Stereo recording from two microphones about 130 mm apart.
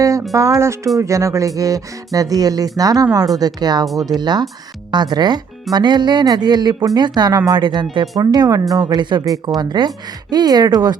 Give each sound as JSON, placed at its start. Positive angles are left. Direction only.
{"t": 0.3, "sound": "speech", "side_deg": -25}